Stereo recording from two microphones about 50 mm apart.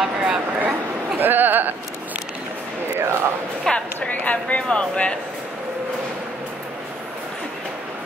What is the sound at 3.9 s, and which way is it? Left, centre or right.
A woman's voice, left.